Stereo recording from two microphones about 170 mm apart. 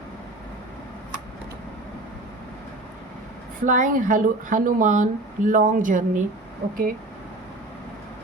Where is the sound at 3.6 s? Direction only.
50° right (ahead or behind).